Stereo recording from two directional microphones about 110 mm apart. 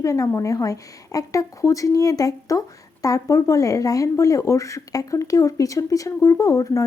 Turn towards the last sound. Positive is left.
turn(degrees=30)  # may be behind; listen again after turning